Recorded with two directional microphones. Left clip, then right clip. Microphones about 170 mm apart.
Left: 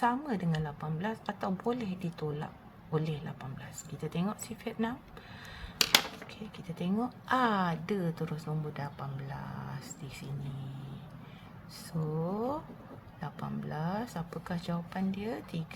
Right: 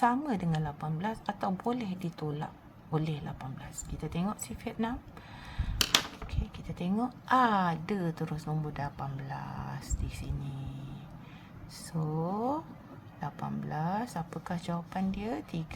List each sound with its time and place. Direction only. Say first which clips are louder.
0.0 s a woman's voice: right 2 dB; 15° right (ahead or behind)
6.7 s a woman's voice: right 1 dB; 15° right (ahead or behind)
11.9 s a woman's voice: right 1 dB; 15° right (ahead or behind)